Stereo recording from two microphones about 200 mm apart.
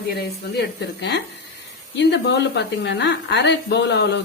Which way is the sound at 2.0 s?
60° left (ahead or behind).